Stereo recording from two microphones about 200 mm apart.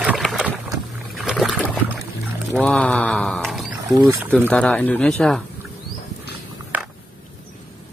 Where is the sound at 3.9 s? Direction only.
15° right (ahead or behind).